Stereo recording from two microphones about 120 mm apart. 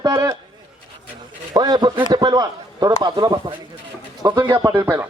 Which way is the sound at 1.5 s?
35° right (ahead or behind).